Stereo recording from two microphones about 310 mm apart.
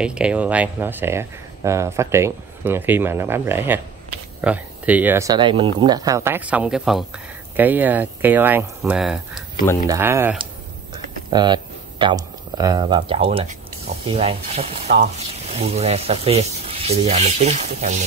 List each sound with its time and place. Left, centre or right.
0.0 s speech: centre; by 18.0 s right